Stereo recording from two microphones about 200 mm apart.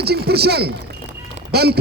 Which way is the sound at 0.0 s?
55° right (ahead or behind).